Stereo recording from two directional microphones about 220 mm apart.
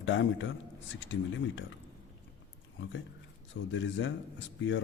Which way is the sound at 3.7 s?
55° left (ahead or behind).